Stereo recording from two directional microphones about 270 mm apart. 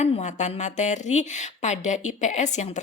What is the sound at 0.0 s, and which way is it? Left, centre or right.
A woman's voice, left.